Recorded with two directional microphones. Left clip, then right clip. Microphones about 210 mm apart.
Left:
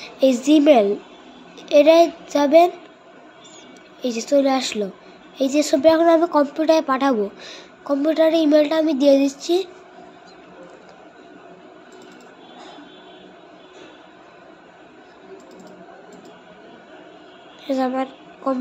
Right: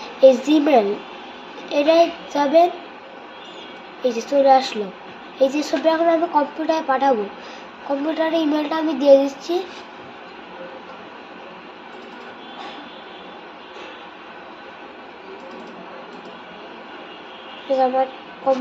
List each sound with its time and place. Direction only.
0.5 s a child's voice: 45° left (ahead or behind)
4.0 s a child's voice: 55° left (ahead or behind)
8.1 s a sound: 65° left (ahead or behind)
17.6 s speech: 60° left (ahead or behind)